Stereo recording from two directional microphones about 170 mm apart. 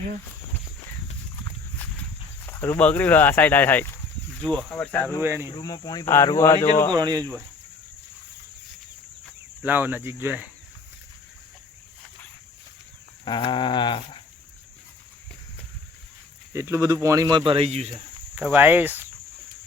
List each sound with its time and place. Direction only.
1.8 s walk: 10° left (ahead or behind)
2.5 s speech: 10° left (ahead or behind)
5.2 s speech: 15° right (ahead or behind)
5.5 s speech: 25° left (ahead or behind)
6.9 s speech: 25° right (ahead or behind)
9.6 s speech: 10° right (ahead or behind)
13.2 s speech: 25° left (ahead or behind)
16.5 s speech: 15° right (ahead or behind); by 17.9 s 35° right (ahead or behind)
18.3 s speech: 10° right (ahead or behind)